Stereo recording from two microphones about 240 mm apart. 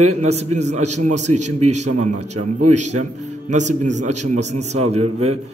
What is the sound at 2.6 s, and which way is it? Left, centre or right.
Speech, right.